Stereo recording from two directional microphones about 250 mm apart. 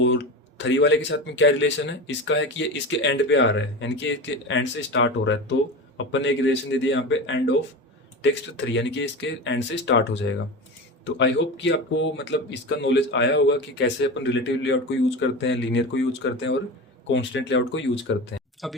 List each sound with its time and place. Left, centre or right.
0.6 s speech: left